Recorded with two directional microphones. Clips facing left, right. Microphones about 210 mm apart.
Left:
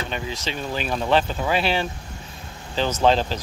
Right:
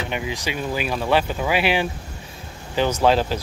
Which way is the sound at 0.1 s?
15° right (ahead or behind).